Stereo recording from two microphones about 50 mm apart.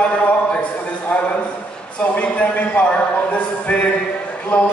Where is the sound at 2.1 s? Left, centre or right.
Left.